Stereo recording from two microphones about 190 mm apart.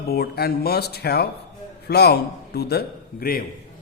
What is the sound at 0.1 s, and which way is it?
A man's voice, 55° left (ahead or behind).